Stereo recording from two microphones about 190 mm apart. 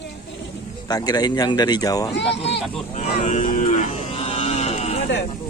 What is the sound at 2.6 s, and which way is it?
Speech, centre (ahead or behind).